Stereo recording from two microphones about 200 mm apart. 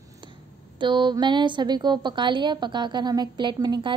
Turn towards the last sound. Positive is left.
turn(degrees=-20)  # may be behind; listen again after turning